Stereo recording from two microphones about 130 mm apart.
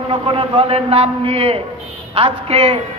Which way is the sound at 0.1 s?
45° right (ahead or behind).